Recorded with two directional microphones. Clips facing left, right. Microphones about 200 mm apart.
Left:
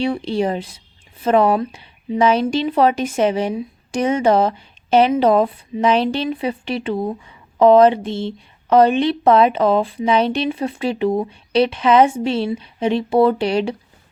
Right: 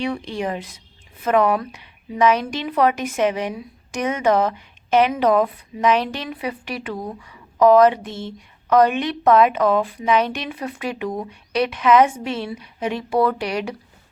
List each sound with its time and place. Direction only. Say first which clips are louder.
0.0 s a woman's voice: left 5 dB; 30° left (ahead or behind)